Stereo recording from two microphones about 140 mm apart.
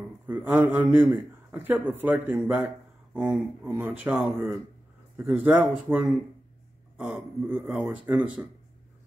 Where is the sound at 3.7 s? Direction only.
10° right (ahead or behind).